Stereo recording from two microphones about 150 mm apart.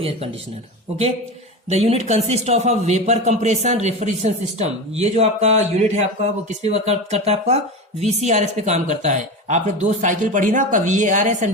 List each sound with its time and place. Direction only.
1.7 s a man's voice: 45° right (ahead or behind)